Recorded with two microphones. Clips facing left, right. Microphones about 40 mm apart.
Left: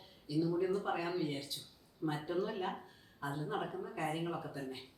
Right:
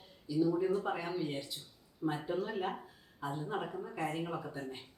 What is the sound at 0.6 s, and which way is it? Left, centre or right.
Speech, right.